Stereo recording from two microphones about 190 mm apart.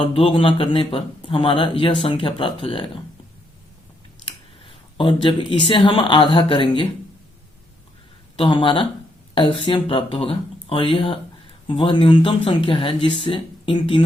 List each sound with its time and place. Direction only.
0.0 s speech: 30° left (ahead or behind)
4.3 s a sound: 25° left (ahead or behind)
5.5 s speech: 25° left (ahead or behind)
8.4 s speech: 25° left (ahead or behind)